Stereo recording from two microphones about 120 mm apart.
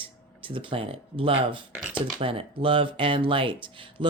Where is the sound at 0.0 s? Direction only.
45° right (ahead or behind).